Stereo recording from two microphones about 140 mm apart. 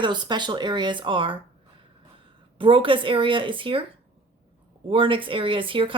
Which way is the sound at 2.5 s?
40° right (ahead or behind).